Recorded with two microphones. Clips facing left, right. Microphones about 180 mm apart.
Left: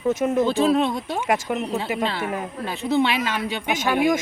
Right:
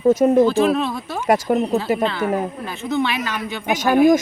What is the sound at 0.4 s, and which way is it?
Speech, 25° left (ahead or behind).